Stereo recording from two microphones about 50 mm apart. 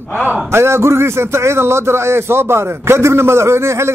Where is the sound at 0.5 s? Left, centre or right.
Right.